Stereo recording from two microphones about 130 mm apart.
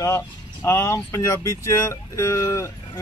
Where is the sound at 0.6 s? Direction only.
20° left (ahead or behind).